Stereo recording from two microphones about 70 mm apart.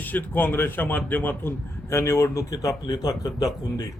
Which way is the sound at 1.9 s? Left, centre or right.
Left.